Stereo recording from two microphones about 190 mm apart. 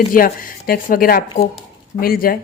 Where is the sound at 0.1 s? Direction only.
45° left (ahead or behind).